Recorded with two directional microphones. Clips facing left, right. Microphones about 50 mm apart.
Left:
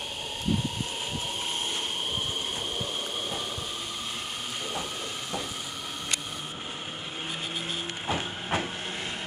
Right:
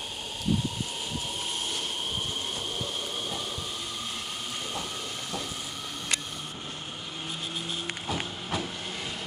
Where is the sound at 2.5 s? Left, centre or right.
Left.